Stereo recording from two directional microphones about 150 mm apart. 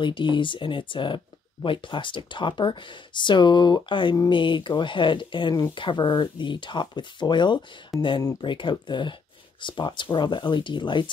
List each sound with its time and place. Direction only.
0.0 s speech: 35° left (ahead or behind)